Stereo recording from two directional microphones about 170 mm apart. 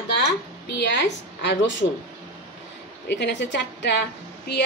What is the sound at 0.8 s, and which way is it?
Speech, 90° left.